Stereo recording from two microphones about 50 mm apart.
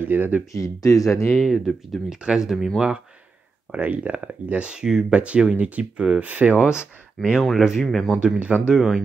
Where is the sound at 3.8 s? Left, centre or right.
Right.